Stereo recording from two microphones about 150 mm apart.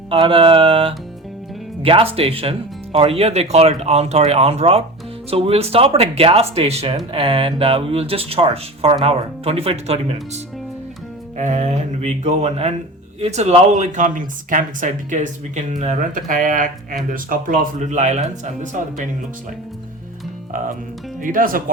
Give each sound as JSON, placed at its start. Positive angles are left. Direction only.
{"t": 0.1, "sound": "speech", "side_deg": -35}
{"t": 21.2, "sound": "speech", "side_deg": -65}